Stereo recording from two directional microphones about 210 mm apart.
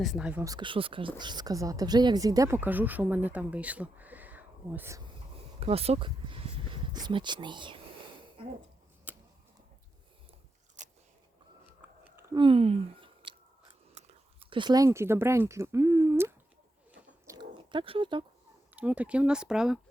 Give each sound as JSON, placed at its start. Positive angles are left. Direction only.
{"t": 0.0, "sound": "a woman's voice", "side_deg": 0}
{"t": 5.5, "sound": "speech", "side_deg": -30}
{"t": 8.4, "sound": "a sound", "side_deg": -25}
{"t": 9.1, "sound": "a sound", "side_deg": -10}
{"t": 10.8, "sound": "biting", "side_deg": -35}
{"t": 11.8, "sound": "chewing", "side_deg": -10}
{"t": 12.4, "sound": "speech", "side_deg": -25}
{"t": 14.5, "sound": "a woman's voice", "side_deg": -20}
{"t": 17.2, "sound": "a sound", "side_deg": -20}
{"t": 18.7, "sound": "speech", "side_deg": -5}